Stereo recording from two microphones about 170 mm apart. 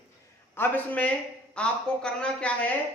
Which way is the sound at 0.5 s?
10° left (ahead or behind).